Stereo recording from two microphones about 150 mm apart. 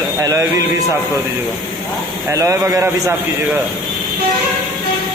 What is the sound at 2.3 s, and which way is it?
Speech, 20° right (ahead or behind).